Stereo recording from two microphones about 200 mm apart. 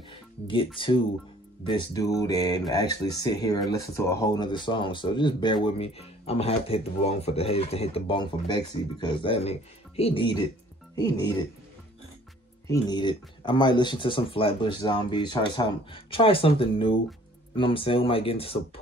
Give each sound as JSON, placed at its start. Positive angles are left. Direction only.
{"t": 0.7, "sound": "speech", "side_deg": 25}
{"t": 12.6, "sound": "speech", "side_deg": 20}